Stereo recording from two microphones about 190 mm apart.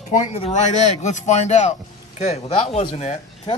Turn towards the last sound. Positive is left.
turn(degrees=35)  # may be behind; listen again after turning